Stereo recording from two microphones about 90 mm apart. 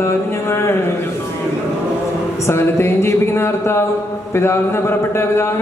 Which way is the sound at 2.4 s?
30° left (ahead or behind).